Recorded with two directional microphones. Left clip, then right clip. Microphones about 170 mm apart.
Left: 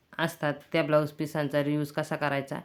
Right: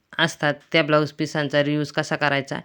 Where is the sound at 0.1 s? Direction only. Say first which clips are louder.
Right 8 dB; 30° right (ahead or behind).